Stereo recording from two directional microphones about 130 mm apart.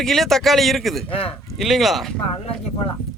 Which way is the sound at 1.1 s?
45° left (ahead or behind).